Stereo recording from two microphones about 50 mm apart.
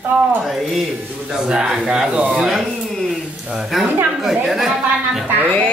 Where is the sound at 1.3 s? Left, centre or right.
Centre.